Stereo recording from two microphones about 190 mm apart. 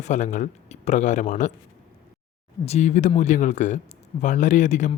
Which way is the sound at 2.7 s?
40° left (ahead or behind).